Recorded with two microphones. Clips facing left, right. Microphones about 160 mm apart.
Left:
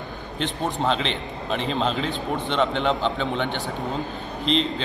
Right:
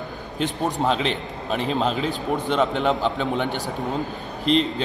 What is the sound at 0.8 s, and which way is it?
A man's voice, 5° right (ahead or behind).